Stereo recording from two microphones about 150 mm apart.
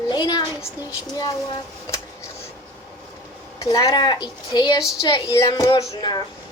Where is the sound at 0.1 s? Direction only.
30° left (ahead or behind).